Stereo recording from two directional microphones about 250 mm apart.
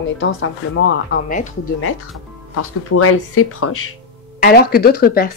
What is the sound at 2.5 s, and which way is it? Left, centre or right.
Speech, left.